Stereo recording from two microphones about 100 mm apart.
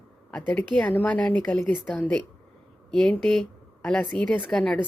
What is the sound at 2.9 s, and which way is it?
Speech, 5° left (ahead or behind).